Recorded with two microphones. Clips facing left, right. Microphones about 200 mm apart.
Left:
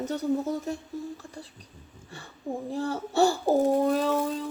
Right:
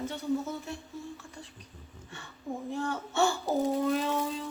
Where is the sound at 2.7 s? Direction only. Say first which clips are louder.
Left 5 dB; 35° left (ahead or behind).